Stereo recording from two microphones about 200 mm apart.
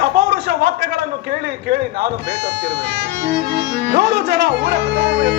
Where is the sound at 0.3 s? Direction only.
50° right (ahead or behind).